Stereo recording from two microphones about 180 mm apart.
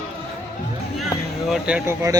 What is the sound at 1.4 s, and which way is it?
Speech, 5° right (ahead or behind).